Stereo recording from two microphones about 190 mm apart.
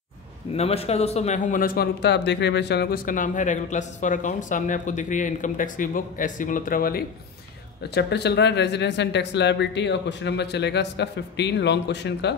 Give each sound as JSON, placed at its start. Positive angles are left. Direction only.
{"t": 0.6, "sound": "a man's voice", "side_deg": 35}